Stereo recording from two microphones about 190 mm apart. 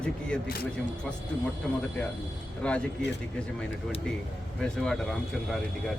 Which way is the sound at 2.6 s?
5° left (ahead or behind).